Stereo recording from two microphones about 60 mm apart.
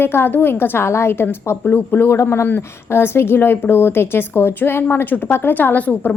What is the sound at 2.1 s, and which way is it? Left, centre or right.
Speech, left.